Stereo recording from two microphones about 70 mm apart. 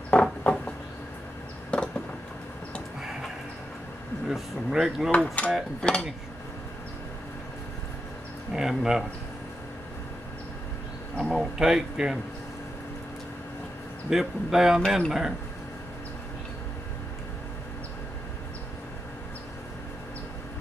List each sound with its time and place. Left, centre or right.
0.1 s a sound: centre
3.0 s tick-tock: centre
4.3 s speech: centre
5.1 s speech: centre
8.5 s speech: centre
11.3 s speech: centre
14.1 s speech: centre